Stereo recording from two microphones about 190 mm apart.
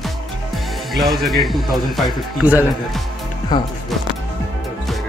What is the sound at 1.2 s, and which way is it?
Speech, centre (ahead or behind).